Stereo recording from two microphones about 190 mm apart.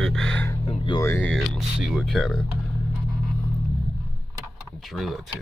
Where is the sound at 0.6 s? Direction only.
25° left (ahead or behind).